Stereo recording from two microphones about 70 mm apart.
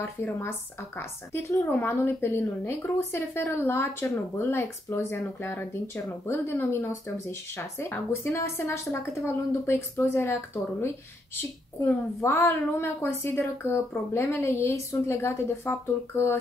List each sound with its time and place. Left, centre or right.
0.0 s speech: left
12.2 s speech: left